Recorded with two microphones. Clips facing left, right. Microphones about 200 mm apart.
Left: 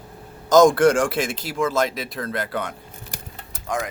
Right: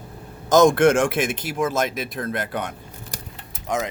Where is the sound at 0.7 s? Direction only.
25° right (ahead or behind).